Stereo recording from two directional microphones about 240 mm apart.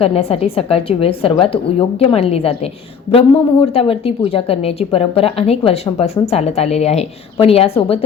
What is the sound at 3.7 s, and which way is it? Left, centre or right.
A woman's voice, left.